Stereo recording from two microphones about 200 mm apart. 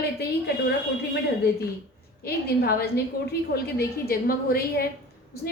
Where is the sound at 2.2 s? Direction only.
50° left (ahead or behind).